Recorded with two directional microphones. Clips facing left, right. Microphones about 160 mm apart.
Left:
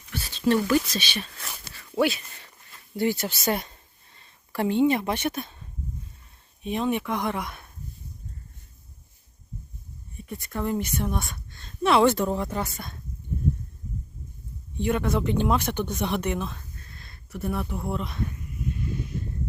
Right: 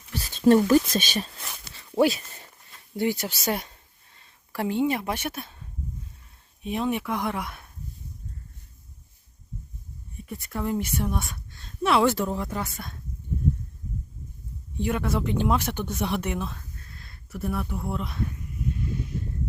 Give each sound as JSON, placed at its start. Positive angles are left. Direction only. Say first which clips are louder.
{"t": 0.1, "sound": "speech", "louder": "right 5 dB", "side_deg": -45}
{"t": 1.7, "sound": "a sound", "louder": "right 2 dB", "side_deg": -25}
{"t": 2.0, "sound": "a sound", "louder": "right 2 dB", "side_deg": -40}
{"t": 3.0, "sound": "a woman's voice", "louder": "left 1 dB", "side_deg": -15}
{"t": 6.7, "sound": "speech", "louder": "left 1 dB", "side_deg": -5}
{"t": 10.4, "sound": "speech", "louder": "even", "side_deg": -5}
{"t": 14.8, "sound": "speech", "louder": "left 2 dB", "side_deg": -5}